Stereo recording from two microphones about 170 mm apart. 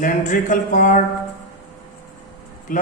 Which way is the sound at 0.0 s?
50° left (ahead or behind).